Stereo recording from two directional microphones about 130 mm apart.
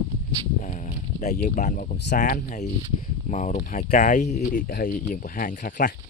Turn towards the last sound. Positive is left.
turn(degrees=90)